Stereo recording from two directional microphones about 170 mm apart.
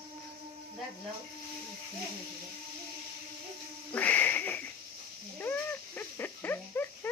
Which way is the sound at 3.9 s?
10° left (ahead or behind).